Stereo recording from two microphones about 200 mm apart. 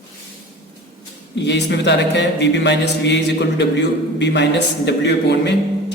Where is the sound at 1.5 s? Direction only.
60° left (ahead or behind).